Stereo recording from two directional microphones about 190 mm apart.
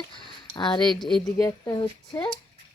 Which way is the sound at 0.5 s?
25° left (ahead or behind).